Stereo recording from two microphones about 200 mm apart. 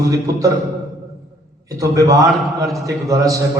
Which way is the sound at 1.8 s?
15° right (ahead or behind).